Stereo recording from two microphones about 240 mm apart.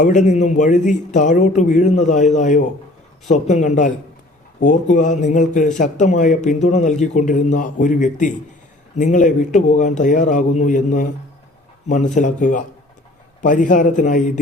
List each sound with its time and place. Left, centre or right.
0.0 s a man's voice: left